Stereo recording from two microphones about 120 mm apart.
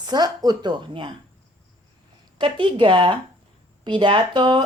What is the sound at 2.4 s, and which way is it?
Speech, 40° right (ahead or behind).